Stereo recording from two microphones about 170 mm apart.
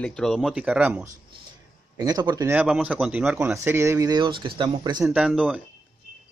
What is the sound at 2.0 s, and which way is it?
Speech, 20° right (ahead or behind).